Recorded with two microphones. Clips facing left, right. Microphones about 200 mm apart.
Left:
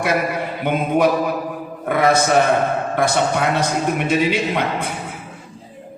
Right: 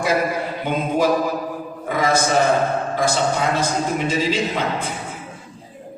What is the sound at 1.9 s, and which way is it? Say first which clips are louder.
A man's voice: left 3 dB; 60° left (ahead or behind).